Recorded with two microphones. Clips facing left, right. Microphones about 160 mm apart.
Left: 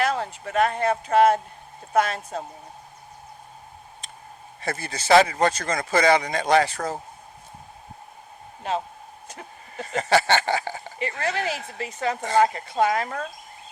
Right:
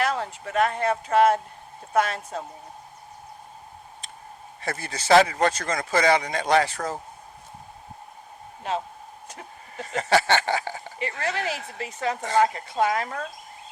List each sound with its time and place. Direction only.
0.1 s speech: 40° left (ahead or behind)
4.6 s speech: 35° left (ahead or behind)
9.7 s speech: 35° left (ahead or behind)